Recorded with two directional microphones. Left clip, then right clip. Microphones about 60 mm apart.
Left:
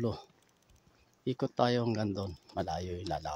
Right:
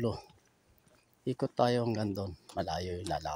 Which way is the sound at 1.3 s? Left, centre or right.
Left.